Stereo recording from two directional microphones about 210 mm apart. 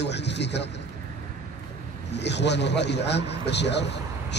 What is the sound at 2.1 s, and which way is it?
A man's voice, 55° left (ahead or behind).